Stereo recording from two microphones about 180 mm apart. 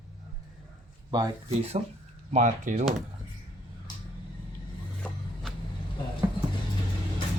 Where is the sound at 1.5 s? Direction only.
35° right (ahead or behind).